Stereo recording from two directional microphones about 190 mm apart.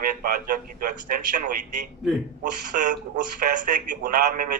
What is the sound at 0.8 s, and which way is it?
Speech, 45° right (ahead or behind).